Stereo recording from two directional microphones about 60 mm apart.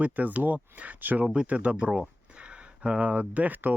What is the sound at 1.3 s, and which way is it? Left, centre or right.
Speech, centre.